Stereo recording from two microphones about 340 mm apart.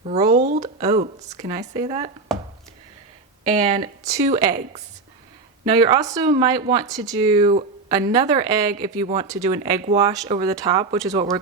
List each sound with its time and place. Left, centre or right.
0.0 s speech: centre
2.3 s a sound: centre
3.5 s speech: centre